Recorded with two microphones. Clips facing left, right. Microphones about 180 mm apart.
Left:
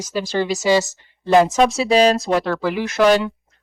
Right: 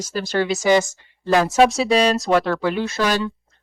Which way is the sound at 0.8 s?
20° left (ahead or behind).